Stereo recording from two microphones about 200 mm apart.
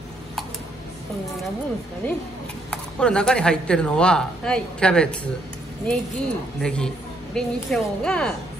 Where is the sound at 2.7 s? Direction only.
5° left (ahead or behind).